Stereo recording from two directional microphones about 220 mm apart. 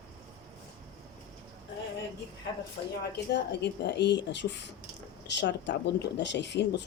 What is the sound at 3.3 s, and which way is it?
Speech, 50° left (ahead or behind).